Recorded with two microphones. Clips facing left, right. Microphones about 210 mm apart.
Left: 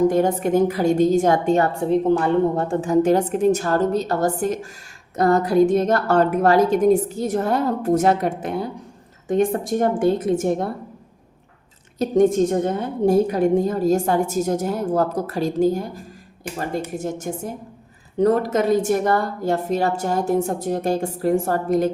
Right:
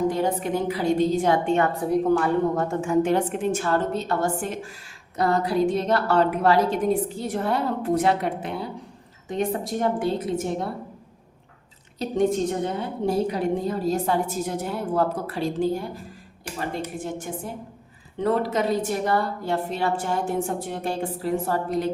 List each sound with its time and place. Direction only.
0.1 s a woman's voice: 50° left (ahead or behind)
1.9 s a woman's voice: 25° left (ahead or behind); by 10.7 s 50° left (ahead or behind)
11.9 s a woman's voice: 45° left (ahead or behind)
17.0 s a woman's voice: 45° left (ahead or behind)